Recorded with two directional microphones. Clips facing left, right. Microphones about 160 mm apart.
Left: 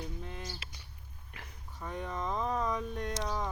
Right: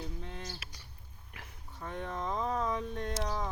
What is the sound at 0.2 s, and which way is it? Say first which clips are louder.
Bird: left 1 dB; 5° left (ahead or behind).